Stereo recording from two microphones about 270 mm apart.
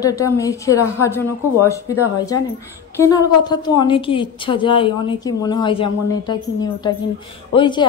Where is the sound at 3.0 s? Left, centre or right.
Centre.